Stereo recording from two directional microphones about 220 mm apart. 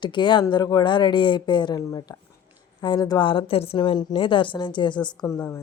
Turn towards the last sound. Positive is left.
turn(degrees=10)  # may be behind; listen again after turning